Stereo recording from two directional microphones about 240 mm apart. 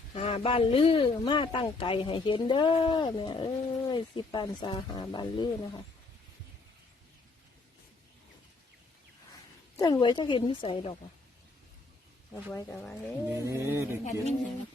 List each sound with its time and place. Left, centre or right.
0.1 s a man's voice: left
9.7 s a man's voice: centre
12.3 s speech: centre
13.3 s a sound: centre
14.0 s a man's voice: left